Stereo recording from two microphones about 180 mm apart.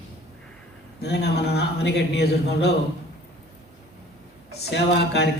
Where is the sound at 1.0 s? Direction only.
65° left (ahead or behind).